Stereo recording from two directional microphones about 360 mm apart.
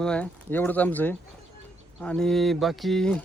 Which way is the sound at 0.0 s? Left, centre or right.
Centre.